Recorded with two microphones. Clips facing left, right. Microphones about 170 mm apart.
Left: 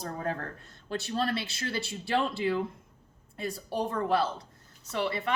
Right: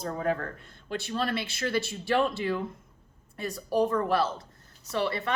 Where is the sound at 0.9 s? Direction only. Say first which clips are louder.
Even; 40° left (ahead or behind).